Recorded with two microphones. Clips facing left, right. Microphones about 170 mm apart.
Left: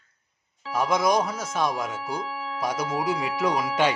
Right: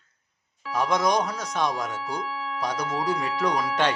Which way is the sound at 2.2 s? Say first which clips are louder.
Even; 15° left (ahead or behind).